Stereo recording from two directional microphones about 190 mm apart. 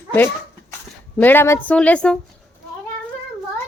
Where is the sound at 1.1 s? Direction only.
10° left (ahead or behind).